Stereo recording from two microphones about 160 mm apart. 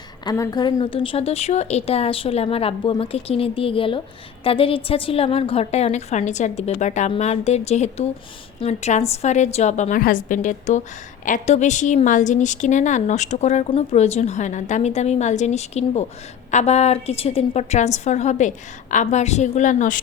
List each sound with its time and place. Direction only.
0.3 s a woman's voice: 25° left (ahead or behind); by 20.0 s 50° left (ahead or behind)